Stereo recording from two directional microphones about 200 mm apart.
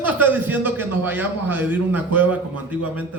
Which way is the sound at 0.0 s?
10° right (ahead or behind).